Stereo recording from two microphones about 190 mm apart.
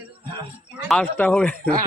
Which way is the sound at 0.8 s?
5° left (ahead or behind).